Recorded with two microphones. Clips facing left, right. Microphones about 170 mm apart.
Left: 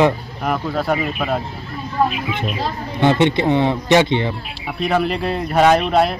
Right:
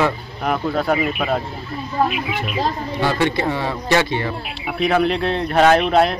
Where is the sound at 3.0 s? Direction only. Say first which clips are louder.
Left 5 dB; 20° left (ahead or behind).